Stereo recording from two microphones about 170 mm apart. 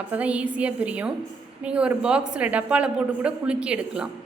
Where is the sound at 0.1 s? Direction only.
10° right (ahead or behind).